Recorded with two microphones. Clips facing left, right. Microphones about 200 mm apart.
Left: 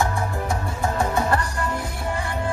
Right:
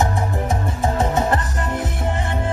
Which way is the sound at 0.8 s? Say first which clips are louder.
Right 3 dB; 20° right (ahead or behind).